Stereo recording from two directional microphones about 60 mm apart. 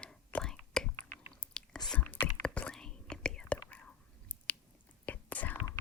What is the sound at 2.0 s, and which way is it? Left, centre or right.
Whispering, left.